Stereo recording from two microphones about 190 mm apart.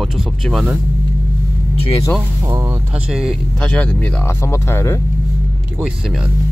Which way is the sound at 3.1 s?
Centre (ahead or behind).